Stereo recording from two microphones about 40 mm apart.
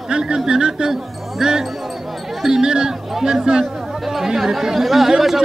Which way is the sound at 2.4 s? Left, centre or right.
Centre.